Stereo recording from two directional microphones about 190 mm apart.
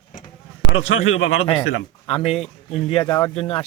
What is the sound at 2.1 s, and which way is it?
Speech, 30° left (ahead or behind).